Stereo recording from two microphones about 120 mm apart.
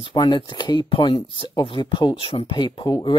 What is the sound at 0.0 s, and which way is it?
Speech, 40° left (ahead or behind).